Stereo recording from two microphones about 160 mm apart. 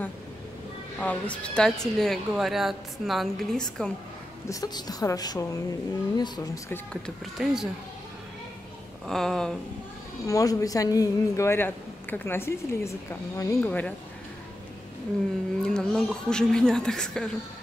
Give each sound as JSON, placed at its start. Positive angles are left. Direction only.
{"t": 0.9, "sound": "a woman's voice", "side_deg": 10}
{"t": 4.5, "sound": "speech", "side_deg": 25}
{"t": 7.3, "sound": "a woman's voice", "side_deg": -5}
{"t": 9.0, "sound": "a woman's voice", "side_deg": 0}
{"t": 10.2, "sound": "speech", "side_deg": 20}
{"t": 15.6, "sound": "a woman's voice", "side_deg": 5}